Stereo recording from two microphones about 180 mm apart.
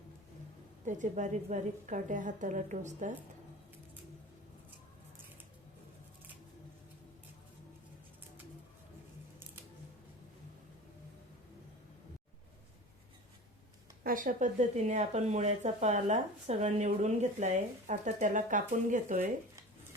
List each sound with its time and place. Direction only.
0.9 s speech: 45° right (ahead or behind)
14.0 s speech: 50° right (ahead or behind)